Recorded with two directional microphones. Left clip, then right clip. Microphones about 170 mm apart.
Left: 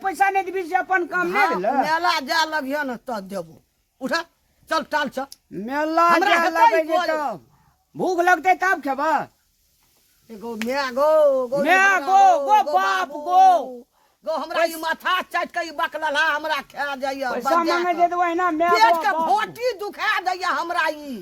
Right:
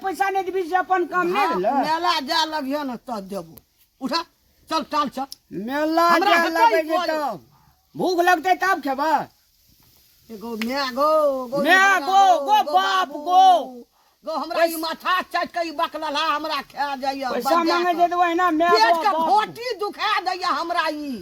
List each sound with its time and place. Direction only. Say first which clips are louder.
0.0 s speech: left 2 dB; centre (ahead or behind)
1.3 s a man's voice: left 3 dB; 30° left (ahead or behind)
5.3 s speech: even; 10° right (ahead or behind)
6.7 s a man's voice: left 1 dB; 40° left (ahead or behind)
7.1 s speech: even; 10° right (ahead or behind)
10.4 s a man's voice: left 1 dB; 35° left (ahead or behind)
11.6 s speech: right 2 dB; 10° right (ahead or behind)
14.3 s a man's voice: right 1 dB; 30° left (ahead or behind)
17.8 s speech: right 1 dB; 15° right (ahead or behind)
19.3 s a man's voice: right 1 dB; 30° left (ahead or behind)